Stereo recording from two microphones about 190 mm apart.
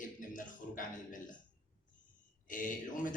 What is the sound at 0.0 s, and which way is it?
Music, 45° left (ahead or behind).